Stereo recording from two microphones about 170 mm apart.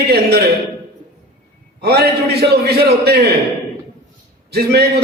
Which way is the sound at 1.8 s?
70° right (ahead or behind).